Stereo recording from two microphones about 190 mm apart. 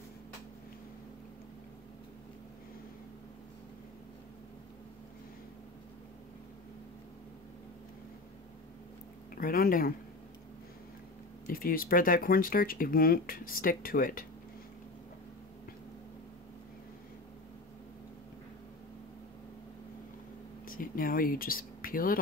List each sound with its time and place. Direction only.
9.3 s a sound: 50° left (ahead or behind)
11.4 s speech: 50° left (ahead or behind)
20.6 s speech: 45° left (ahead or behind)